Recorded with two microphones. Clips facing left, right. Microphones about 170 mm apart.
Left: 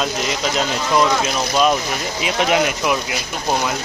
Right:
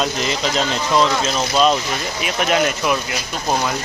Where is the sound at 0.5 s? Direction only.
10° left (ahead or behind).